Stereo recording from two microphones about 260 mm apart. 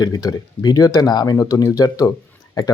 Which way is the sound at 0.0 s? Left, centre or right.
Centre.